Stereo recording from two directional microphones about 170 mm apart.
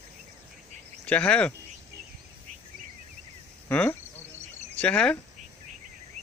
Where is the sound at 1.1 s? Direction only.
5° left (ahead or behind).